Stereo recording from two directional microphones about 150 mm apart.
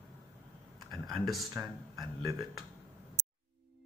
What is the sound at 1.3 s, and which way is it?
Speech, centre (ahead or behind).